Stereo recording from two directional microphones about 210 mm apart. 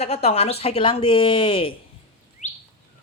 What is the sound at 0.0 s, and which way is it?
Speech, 30° left (ahead or behind).